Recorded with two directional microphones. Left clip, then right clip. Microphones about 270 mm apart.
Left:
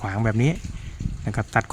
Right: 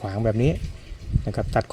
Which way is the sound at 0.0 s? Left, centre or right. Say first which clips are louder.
Right 1 dB; centre.